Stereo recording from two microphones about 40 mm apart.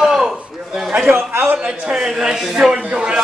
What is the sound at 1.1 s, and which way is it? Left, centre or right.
Speech, right.